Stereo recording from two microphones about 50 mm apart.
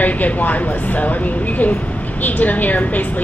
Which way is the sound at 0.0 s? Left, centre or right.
Left.